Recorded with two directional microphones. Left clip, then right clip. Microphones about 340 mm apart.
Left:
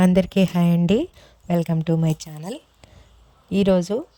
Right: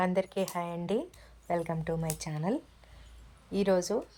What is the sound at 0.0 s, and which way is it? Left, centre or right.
Speech, left.